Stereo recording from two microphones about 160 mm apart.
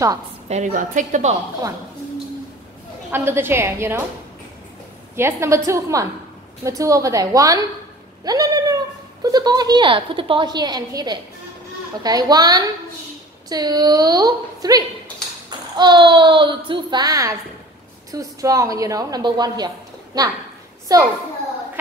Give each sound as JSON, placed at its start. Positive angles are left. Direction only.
{"t": 0.5, "sound": "a woman's voice", "side_deg": -50}
{"t": 3.1, "sound": "a woman's voice", "side_deg": -15}
{"t": 5.1, "sound": "a woman's voice", "side_deg": -15}
{"t": 20.9, "sound": "a woman's voice", "side_deg": -25}